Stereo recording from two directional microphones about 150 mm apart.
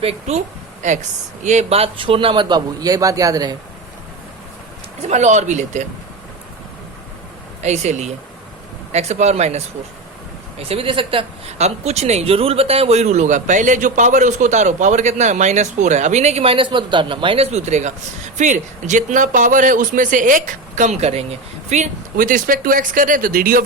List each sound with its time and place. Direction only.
0.0 s a woman's voice: 45° right (ahead or behind); by 3.5 s 25° right (ahead or behind)
5.0 s speech: 50° right (ahead or behind)
7.6 s speech: 50° right (ahead or behind); by 23.6 s 70° right (ahead or behind)